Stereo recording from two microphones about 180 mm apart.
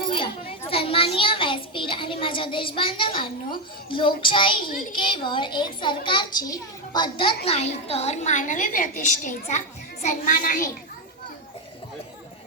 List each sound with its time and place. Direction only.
0.7 s a child's voice: 30° left (ahead or behind); by 10.7 s 50° left (ahead or behind)